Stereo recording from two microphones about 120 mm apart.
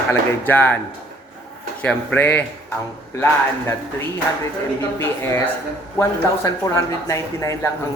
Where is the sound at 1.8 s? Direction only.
15° left (ahead or behind).